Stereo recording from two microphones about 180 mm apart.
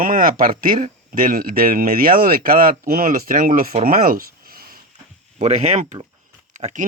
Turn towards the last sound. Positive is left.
turn(degrees=-40)  # may be behind; listen again after turning